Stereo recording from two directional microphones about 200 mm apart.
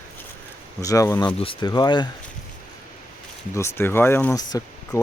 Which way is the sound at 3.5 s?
10° left (ahead or behind).